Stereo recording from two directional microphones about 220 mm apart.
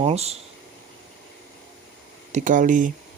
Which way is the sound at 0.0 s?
30° right (ahead or behind).